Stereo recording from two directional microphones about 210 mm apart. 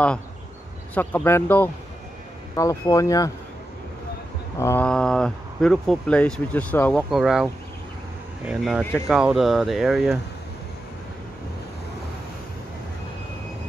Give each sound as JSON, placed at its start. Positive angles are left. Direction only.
{"t": 0.9, "sound": "speech", "side_deg": 10}
{"t": 4.6, "sound": "speech", "side_deg": 10}